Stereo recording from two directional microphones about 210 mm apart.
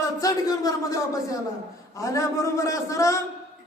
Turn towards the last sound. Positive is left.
turn(degrees=15)  # may be behind; listen again after turning